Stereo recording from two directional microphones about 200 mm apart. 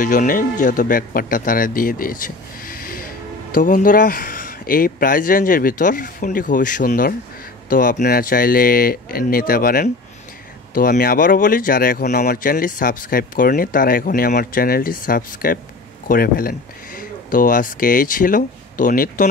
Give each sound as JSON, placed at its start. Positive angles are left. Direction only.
{"t": 0.0, "sound": "a man's voice", "side_deg": 40}